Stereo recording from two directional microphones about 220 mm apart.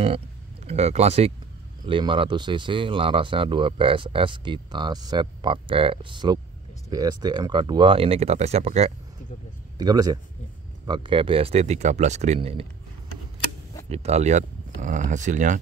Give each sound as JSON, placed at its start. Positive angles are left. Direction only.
{"t": 0.7, "sound": "speech", "side_deg": -30}
{"t": 9.8, "sound": "speech", "side_deg": -15}
{"t": 13.8, "sound": "speech", "side_deg": -30}